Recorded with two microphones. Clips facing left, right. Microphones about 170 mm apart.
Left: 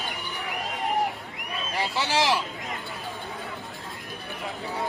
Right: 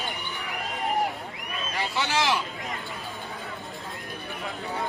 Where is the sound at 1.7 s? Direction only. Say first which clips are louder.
Left 2 dB; 35° left (ahead or behind).